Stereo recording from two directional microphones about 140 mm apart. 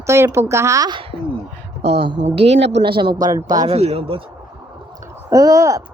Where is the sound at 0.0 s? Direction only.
20° right (ahead or behind).